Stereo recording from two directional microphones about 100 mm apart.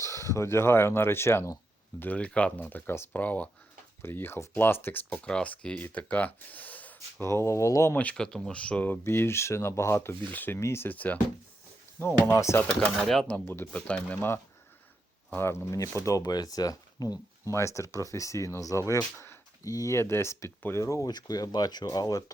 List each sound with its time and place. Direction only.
0.2 s speech: 30° left (ahead or behind)
2.0 s speech: 15° left (ahead or behind)
5.0 s speech: 10° left (ahead or behind)
7.3 s speech: 30° left (ahead or behind)
7.9 s speech: 10° left (ahead or behind); by 12.6 s 30° left (ahead or behind)
12.6 s speech: 5° left (ahead or behind); by 18.8 s 35° left (ahead or behind)
18.9 s a sound: 20° left (ahead or behind)
19.7 s speech: 30° left (ahead or behind)